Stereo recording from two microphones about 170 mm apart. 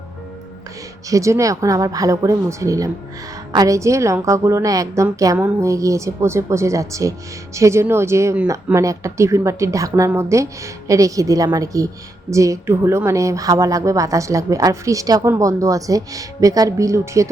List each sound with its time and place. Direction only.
1.1 s a woman's voice: 20° right (ahead or behind)